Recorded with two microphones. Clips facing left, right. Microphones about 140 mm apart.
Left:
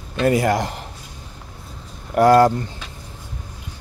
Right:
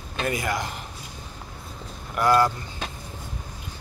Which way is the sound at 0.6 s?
90° left.